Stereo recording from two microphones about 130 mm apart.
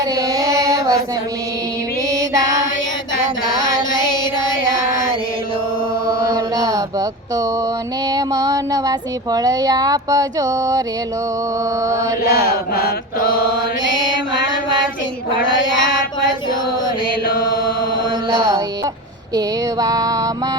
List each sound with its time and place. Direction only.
0.0 s child singing: 25° right (ahead or behind)
3.6 s carnatic music: 30° left (ahead or behind)
6.3 s a sound: 25° right (ahead or behind)
8.1 s speech: 30° right (ahead or behind)
19.3 s speech: 30° right (ahead or behind)